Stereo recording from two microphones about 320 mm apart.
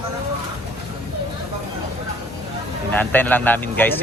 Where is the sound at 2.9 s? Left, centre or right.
Centre.